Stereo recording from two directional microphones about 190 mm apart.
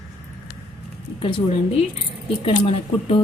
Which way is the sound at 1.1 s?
30° left (ahead or behind).